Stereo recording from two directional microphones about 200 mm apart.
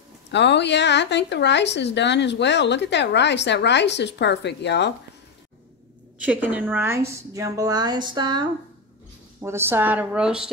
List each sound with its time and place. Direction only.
0.3 s speech: 60° left (ahead or behind)
6.2 s a woman's voice: 5° right (ahead or behind); by 8.5 s 25° right (ahead or behind)
9.4 s a woman's voice: 10° right (ahead or behind)